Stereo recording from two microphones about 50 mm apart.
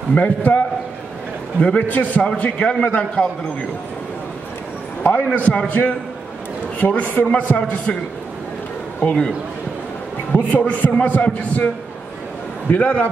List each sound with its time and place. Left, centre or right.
0.1 s a man's voice: left
5.2 s a man's voice: left
6.8 s a woman's voice: left
7.2 s speech: left
9.0 s speech: centre
10.3 s a man's voice: left